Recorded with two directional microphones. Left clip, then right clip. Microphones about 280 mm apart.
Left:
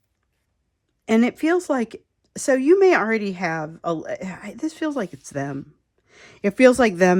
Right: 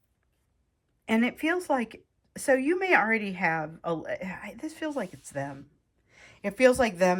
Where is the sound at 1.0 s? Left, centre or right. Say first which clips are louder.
Left 7 dB; centre.